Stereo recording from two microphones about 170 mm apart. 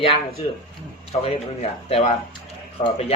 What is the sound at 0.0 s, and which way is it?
Speech, 35° left (ahead or behind).